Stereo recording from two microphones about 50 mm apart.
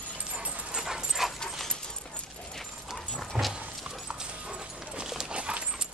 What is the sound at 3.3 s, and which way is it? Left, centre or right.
Dog, centre.